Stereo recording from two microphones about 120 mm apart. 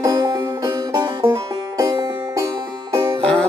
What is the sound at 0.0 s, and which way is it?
Music, 25° right (ahead or behind).